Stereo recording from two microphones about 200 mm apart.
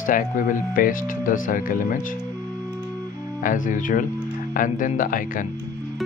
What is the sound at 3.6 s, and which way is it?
Speech, 40° left (ahead or behind).